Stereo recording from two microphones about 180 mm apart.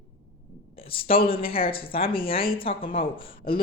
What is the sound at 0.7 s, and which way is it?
A woman's voice, 30° left (ahead or behind).